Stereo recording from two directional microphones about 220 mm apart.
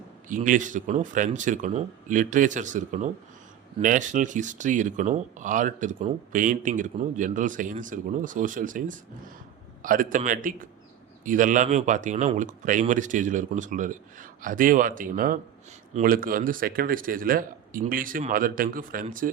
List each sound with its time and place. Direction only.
0.3 s speech: 35° right (ahead or behind)